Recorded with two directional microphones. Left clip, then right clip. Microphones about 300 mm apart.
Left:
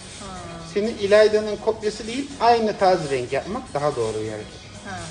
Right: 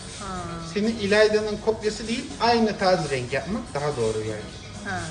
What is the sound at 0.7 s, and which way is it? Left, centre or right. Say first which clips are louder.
Speech: left 4 dB; left.